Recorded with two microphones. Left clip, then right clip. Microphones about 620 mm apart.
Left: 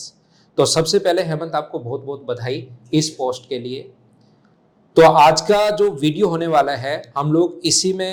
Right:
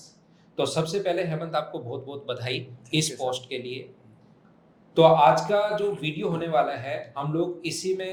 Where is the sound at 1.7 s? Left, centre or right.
Left.